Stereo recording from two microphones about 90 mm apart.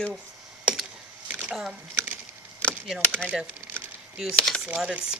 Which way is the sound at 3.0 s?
10° left (ahead or behind).